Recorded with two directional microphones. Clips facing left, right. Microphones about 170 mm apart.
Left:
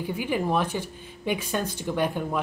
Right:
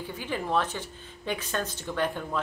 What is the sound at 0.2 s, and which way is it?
A woman's voice, 15° left (ahead or behind).